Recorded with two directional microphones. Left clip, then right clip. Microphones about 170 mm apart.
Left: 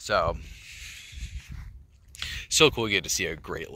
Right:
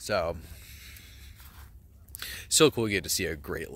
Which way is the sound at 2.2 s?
40° right (ahead or behind).